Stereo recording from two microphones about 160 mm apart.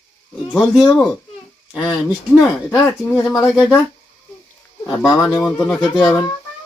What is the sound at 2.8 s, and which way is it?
Speech, 10° left (ahead or behind).